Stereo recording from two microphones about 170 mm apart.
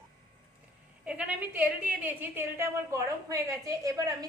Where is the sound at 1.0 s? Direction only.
5° right (ahead or behind).